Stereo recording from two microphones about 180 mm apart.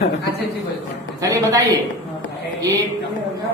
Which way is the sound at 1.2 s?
20° right (ahead or behind).